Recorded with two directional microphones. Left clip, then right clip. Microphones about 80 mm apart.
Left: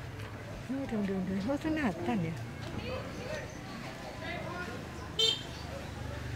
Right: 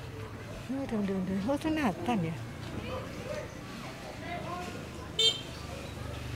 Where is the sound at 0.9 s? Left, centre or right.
Centre.